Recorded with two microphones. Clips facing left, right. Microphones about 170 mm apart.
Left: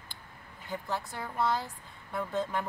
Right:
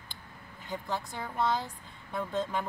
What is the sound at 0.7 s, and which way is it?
Speech, 5° left (ahead or behind).